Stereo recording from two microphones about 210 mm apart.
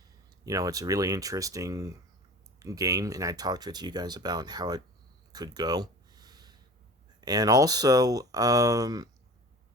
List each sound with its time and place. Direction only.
0.4 s speech: 15° right (ahead or behind)
5.3 s a sound: 20° right (ahead or behind)
7.2 s speech: 20° right (ahead or behind)